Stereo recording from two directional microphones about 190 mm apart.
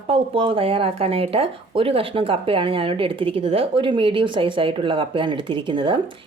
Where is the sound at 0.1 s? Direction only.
30° right (ahead or behind).